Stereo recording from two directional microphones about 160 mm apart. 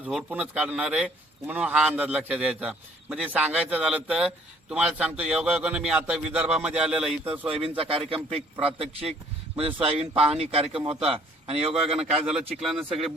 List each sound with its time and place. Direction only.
0.0 s a man's voice: 5° right (ahead or behind)
7.4 s speech: 35° right (ahead or behind)
11.7 s speech: 5° right (ahead or behind)